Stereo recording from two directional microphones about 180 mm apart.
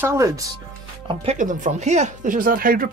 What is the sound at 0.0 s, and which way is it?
Speech, 15° right (ahead or behind).